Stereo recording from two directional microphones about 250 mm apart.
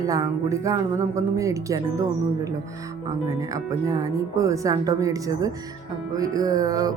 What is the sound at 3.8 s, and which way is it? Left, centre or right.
Speech, centre.